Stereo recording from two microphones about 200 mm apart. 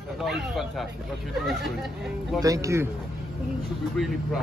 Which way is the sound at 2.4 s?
15° right (ahead or behind).